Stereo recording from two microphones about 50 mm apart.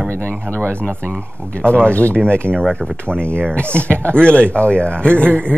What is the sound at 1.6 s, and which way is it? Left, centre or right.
Speech, left.